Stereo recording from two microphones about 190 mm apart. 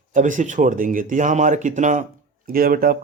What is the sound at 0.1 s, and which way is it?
Speech, 40° right (ahead or behind).